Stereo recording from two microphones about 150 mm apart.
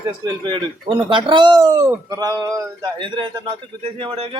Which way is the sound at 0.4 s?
30° right (ahead or behind).